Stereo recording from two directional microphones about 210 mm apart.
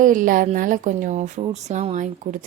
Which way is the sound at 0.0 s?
40° right (ahead or behind).